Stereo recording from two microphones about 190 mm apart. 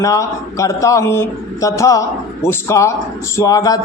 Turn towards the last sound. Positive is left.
turn(degrees=20)  # may be behind; listen again after turning